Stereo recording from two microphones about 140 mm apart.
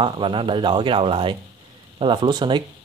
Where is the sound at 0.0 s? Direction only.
35° right (ahead or behind).